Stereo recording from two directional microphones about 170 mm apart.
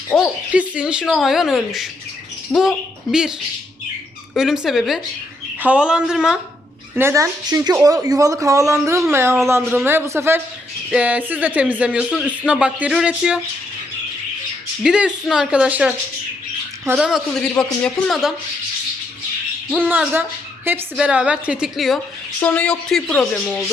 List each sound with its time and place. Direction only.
0.1 s speech: 10° left (ahead or behind)
0.5 s speech: 10° right (ahead or behind)
4.4 s speech: centre (ahead or behind)
6.9 s speech: 15° right (ahead or behind)
14.8 s speech: 5° right (ahead or behind)
19.9 s speech: 10° right (ahead or behind)
22.4 s speech: 10° left (ahead or behind)